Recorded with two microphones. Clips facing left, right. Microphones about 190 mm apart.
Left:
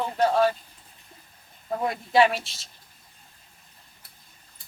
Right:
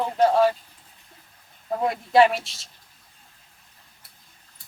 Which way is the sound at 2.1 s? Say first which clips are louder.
Right 3 dB; centre (ahead or behind).